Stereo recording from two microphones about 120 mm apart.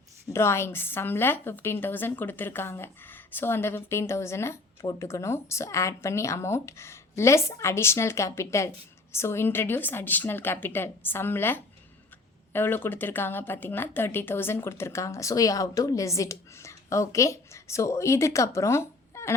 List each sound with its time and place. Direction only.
0.3 s a woman's voice: 20° left (ahead or behind)